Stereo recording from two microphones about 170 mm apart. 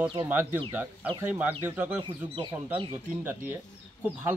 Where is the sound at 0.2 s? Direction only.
10° right (ahead or behind).